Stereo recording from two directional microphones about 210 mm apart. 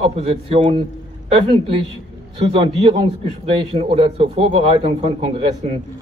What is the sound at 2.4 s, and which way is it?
A man's voice, 25° right (ahead or behind).